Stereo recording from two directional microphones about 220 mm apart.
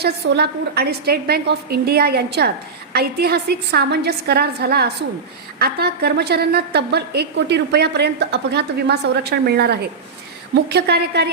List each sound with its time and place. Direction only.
0.0 s a woman's voice: 45° right (ahead or behind)